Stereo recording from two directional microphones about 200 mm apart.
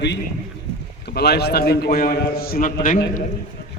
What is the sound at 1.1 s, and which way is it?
A man's voice, 55° left (ahead or behind).